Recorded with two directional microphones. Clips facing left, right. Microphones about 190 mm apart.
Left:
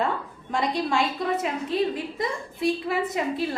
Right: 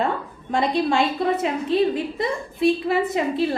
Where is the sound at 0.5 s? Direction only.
25° right (ahead or behind).